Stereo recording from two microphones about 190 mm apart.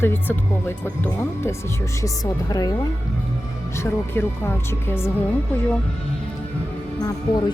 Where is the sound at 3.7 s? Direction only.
10° left (ahead or behind).